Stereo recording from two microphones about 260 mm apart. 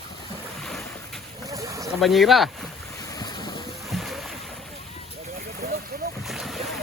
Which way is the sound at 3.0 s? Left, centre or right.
Centre.